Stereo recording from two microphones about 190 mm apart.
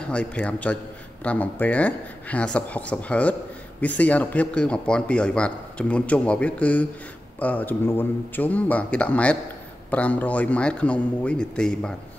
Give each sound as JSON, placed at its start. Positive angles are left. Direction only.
{"t": 0.0, "sound": "a man's voice", "side_deg": 5}